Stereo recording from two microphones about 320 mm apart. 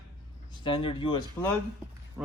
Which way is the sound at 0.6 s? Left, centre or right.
Centre.